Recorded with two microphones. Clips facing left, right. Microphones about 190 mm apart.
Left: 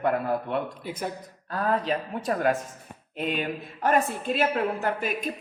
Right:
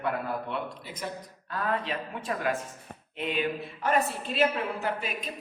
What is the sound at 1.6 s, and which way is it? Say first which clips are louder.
A woman's voice: left 5 dB; 40° left (ahead or behind).